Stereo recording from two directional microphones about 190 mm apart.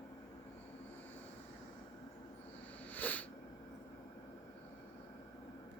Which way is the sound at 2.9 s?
10° left (ahead or behind).